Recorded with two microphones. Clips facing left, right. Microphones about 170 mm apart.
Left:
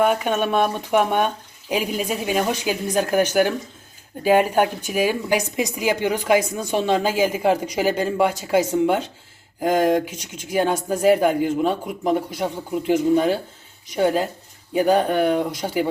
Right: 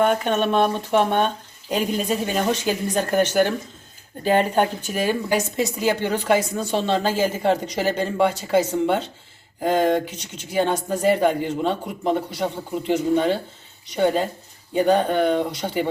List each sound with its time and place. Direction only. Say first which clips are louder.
0.0 s speech: even; 5° left (ahead or behind)